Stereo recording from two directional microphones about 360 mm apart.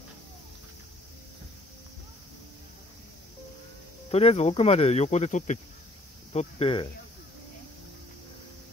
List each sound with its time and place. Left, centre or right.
4.1 s speech: centre